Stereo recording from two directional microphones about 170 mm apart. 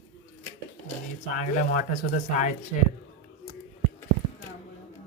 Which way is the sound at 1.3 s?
50° left (ahead or behind).